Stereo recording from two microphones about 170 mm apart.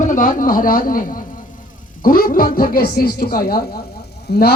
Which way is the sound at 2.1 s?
60° left (ahead or behind).